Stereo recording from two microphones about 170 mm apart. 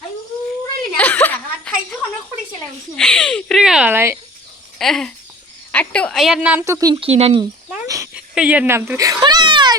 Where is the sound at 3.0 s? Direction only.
5° left (ahead or behind); by 4.2 s 15° right (ahead or behind).